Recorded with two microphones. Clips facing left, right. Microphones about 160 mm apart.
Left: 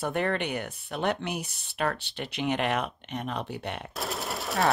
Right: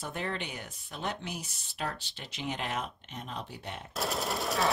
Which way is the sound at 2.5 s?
65° left (ahead or behind).